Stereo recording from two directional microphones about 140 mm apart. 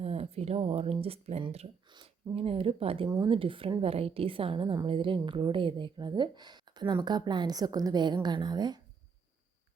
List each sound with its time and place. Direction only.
0.0 s a woman's voice: 45° right (ahead or behind); by 8.8 s 30° right (ahead or behind)